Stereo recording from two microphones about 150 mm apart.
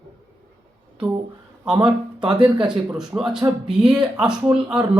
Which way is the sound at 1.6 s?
5° right (ahead or behind).